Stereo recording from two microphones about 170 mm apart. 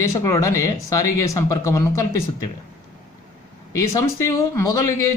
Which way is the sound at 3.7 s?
20° left (ahead or behind).